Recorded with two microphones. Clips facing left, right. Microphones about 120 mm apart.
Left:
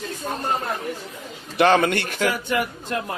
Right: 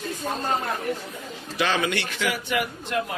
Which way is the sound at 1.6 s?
55° left (ahead or behind).